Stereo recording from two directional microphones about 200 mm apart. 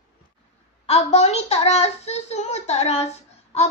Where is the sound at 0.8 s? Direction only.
30° left (ahead or behind).